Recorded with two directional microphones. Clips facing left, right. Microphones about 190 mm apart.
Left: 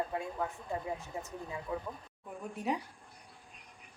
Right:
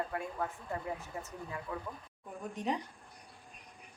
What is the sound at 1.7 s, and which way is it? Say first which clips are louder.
Speech: left 3 dB; 15° left (ahead or behind).